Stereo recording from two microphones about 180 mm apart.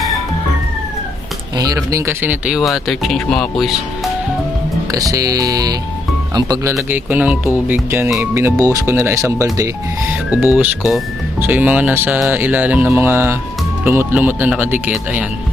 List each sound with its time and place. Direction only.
1.5 s speech: 20° right (ahead or behind); by 4.1 s centre (ahead or behind)
4.9 s speech: 20° right (ahead or behind)